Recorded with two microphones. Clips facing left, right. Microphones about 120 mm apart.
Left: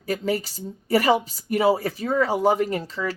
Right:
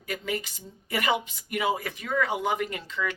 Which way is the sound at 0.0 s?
35° left (ahead or behind).